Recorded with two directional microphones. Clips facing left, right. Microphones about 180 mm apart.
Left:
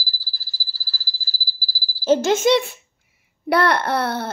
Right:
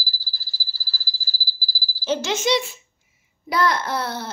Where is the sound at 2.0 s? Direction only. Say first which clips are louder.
Left 7 dB; 45° left (ahead or behind).